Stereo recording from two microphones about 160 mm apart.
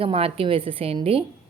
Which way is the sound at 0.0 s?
35° right (ahead or behind).